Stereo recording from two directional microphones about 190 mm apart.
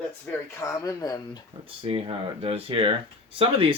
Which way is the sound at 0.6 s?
20° left (ahead or behind).